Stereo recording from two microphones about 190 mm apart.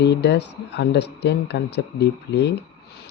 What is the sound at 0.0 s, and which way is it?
Speech, 65° left (ahead or behind).